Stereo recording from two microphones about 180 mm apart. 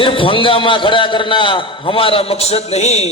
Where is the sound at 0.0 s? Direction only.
30° left (ahead or behind).